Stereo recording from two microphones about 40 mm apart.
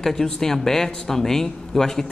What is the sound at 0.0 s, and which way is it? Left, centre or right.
A woman's voice, centre.